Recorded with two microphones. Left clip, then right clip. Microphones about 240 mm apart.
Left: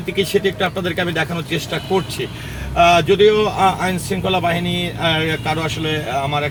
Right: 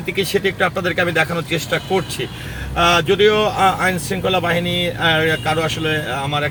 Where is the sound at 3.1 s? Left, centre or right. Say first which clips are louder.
Left 1 dB; right.